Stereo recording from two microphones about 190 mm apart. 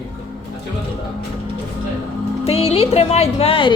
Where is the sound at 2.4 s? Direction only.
30° left (ahead or behind).